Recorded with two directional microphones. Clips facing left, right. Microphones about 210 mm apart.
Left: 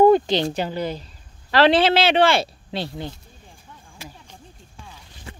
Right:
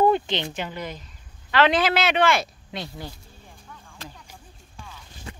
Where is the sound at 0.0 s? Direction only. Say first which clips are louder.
Left 6 dB; 40° left (ahead or behind).